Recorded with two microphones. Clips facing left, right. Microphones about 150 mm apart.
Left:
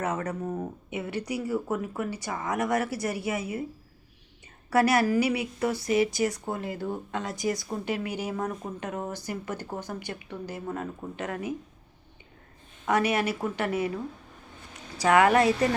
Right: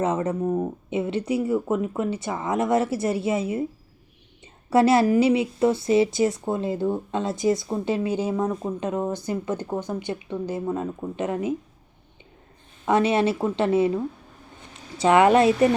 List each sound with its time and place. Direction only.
0.0 s a woman's voice: 25° right (ahead or behind)
4.7 s a woman's voice: 25° right (ahead or behind)
12.8 s a woman's voice: 25° right (ahead or behind)